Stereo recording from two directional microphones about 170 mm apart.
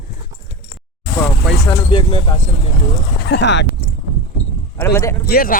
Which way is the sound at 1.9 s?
30° left (ahead or behind).